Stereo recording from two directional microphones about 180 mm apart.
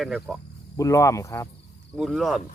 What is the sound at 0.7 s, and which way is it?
Speech, 15° left (ahead or behind).